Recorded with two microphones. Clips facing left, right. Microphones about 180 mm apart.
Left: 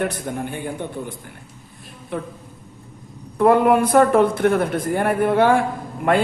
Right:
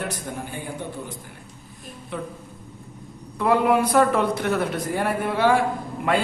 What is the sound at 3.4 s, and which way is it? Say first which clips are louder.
Speech: left 5 dB; 50° left (ahead or behind).